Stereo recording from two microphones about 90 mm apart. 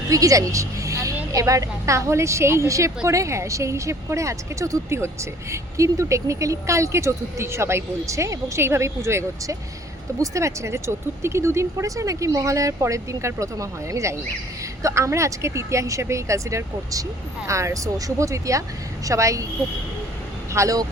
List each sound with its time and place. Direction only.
0.1 s a woman's voice: 40° right (ahead or behind)
20.5 s speech: 35° right (ahead or behind)